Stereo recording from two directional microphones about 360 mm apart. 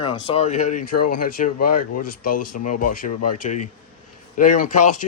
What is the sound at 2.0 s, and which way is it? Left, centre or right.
Speech, left.